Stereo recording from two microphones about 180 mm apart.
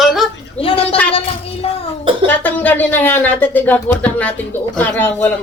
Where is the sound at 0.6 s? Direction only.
30° left (ahead or behind).